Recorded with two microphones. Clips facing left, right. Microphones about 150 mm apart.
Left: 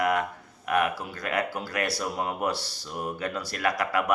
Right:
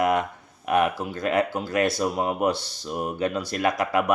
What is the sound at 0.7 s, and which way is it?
Speech, 25° right (ahead or behind).